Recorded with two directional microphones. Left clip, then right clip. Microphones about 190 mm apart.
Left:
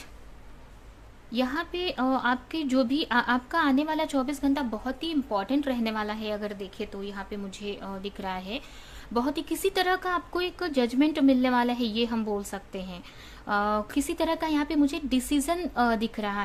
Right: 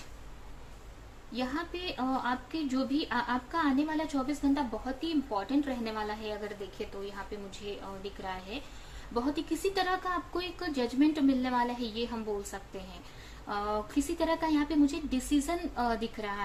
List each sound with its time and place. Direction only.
1.3 s a woman's voice: 65° left (ahead or behind)